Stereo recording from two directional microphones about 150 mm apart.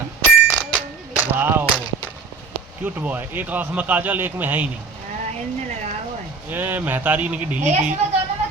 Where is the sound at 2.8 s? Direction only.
10° right (ahead or behind).